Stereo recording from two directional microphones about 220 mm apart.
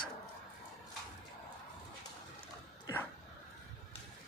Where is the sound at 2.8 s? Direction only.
10° left (ahead or behind).